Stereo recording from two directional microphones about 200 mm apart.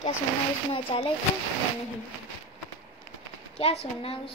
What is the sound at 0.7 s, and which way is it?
Speech, 30° left (ahead or behind).